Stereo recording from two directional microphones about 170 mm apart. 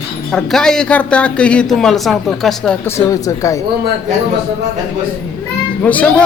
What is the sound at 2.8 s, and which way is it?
Speech, 20° left (ahead or behind).